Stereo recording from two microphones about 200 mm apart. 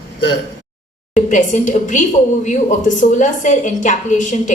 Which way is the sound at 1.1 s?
40° left (ahead or behind).